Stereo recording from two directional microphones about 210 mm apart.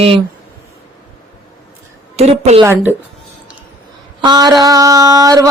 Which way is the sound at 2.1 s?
30° right (ahead or behind).